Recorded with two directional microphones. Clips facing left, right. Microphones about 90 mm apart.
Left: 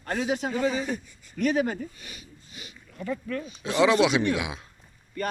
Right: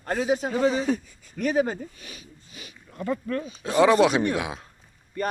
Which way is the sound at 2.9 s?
50° right (ahead or behind).